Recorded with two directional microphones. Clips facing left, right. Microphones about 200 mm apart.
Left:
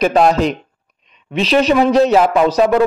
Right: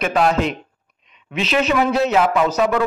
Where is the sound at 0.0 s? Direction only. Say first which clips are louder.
Left 5 dB; 40° left (ahead or behind).